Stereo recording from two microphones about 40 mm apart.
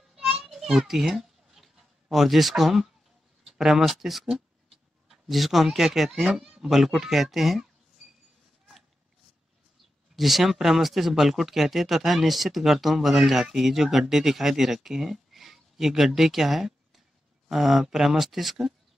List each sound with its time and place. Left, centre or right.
0.1 s a sound: centre
3.4 s speech: centre
6.7 s speech: centre
10.1 s speech: centre